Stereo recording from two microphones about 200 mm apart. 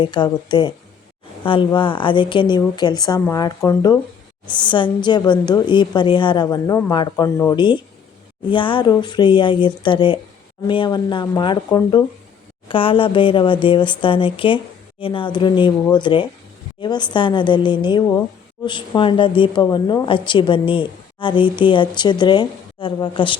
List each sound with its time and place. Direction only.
0.0 s a woman's voice: 20° left (ahead or behind)